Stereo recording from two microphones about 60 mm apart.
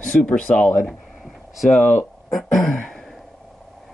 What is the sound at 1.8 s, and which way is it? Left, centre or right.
Speech, left.